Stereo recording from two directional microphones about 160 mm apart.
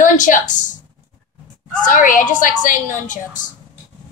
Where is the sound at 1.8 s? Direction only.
55° left (ahead or behind).